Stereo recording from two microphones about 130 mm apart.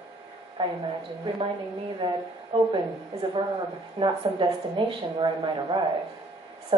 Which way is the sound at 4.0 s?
40° right (ahead or behind).